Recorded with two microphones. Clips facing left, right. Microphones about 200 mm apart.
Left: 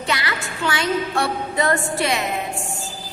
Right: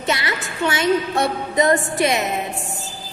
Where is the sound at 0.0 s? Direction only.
25° right (ahead or behind).